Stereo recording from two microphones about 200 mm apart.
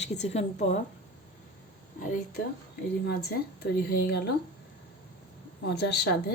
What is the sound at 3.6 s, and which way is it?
Speech, 50° left (ahead or behind).